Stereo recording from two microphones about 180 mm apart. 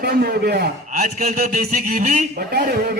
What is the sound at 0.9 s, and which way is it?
A woman's voice, 40° right (ahead or behind).